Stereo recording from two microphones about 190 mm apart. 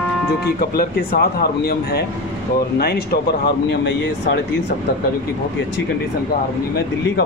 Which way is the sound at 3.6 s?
70° left (ahead or behind).